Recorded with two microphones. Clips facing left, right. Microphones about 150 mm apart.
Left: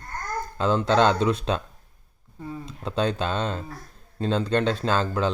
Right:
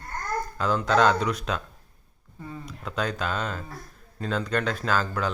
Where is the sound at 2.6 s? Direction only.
30° left (ahead or behind).